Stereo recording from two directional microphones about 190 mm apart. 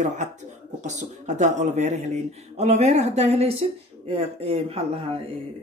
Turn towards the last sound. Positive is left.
turn(degrees=-30)  # may be behind; listen again after turning